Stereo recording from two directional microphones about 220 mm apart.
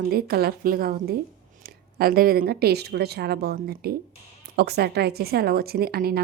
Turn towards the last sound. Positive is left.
turn(degrees=-45)  # may be behind; listen again after turning